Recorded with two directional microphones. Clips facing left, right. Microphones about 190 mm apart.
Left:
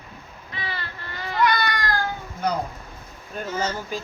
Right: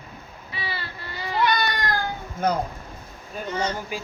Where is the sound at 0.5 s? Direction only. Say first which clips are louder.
Even; 10° right (ahead or behind).